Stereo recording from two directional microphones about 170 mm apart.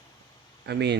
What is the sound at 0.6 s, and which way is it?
Speech, 80° right.